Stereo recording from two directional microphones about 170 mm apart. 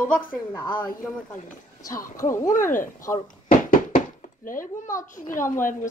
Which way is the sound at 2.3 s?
15° left (ahead or behind).